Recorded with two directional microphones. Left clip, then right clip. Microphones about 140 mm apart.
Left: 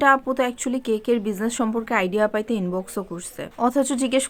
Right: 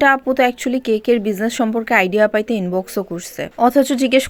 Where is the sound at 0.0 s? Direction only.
25° right (ahead or behind).